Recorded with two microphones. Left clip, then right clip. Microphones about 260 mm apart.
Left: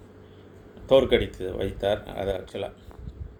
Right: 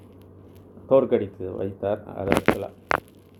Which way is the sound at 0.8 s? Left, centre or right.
Centre.